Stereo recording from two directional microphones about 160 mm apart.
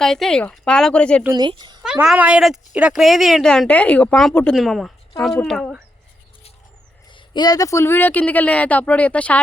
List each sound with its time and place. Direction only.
0.0 s speech: 5° left (ahead or behind)
1.3 s speech: 25° right (ahead or behind)
1.8 s speech: 5° right (ahead or behind)
7.1 s speech: 30° left (ahead or behind); by 9.4 s 10° left (ahead or behind)